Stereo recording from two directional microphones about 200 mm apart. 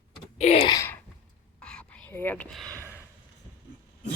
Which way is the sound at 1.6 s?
5° left (ahead or behind).